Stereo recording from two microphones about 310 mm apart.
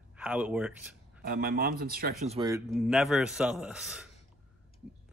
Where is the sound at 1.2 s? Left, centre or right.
Right.